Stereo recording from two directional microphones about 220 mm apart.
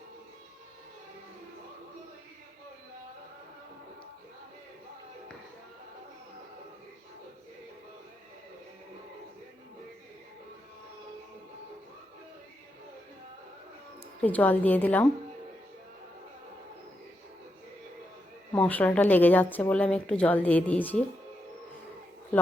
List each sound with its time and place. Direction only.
14.2 s a woman's voice: 5° left (ahead or behind)
18.5 s a woman's voice: 5° left (ahead or behind)